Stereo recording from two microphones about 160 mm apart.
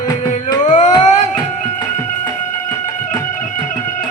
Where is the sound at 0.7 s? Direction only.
50° left (ahead or behind).